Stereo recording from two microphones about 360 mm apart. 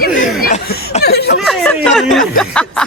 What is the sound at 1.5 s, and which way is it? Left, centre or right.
Speech, centre.